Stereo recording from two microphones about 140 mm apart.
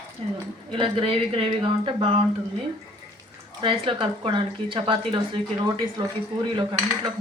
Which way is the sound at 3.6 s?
40° right (ahead or behind).